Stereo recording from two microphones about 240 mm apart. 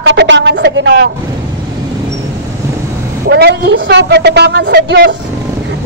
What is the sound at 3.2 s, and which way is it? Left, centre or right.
A man's voice, right.